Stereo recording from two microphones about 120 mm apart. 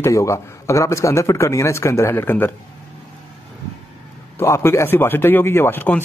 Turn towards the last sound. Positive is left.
turn(degrees=15)  # may be behind; listen again after turning